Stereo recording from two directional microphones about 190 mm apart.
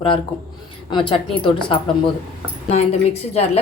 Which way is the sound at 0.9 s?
25° left (ahead or behind).